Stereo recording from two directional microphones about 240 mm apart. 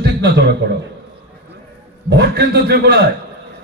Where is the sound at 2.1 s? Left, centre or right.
Right.